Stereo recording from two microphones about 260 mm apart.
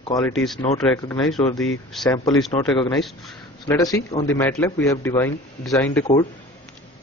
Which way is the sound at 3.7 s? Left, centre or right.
Centre.